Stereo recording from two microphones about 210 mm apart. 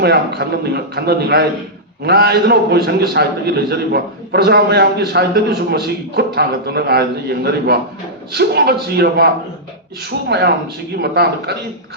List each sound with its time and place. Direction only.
0.0 s a man's voice: 50° right (ahead or behind)